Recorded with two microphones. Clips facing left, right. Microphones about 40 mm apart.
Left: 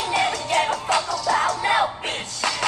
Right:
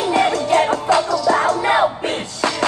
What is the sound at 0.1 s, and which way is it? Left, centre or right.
Music, right.